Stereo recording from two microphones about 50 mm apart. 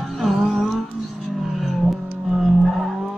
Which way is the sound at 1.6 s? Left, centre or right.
Centre.